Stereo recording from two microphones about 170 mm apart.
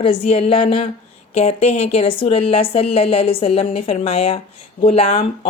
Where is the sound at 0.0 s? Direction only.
35° left (ahead or behind).